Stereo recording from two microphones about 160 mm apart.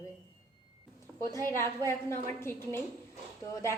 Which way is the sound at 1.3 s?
15° left (ahead or behind).